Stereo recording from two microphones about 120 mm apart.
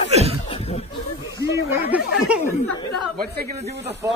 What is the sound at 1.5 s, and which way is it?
Speech, 20° right (ahead or behind).